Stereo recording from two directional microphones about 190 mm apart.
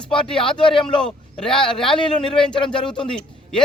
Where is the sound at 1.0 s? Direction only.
5° left (ahead or behind).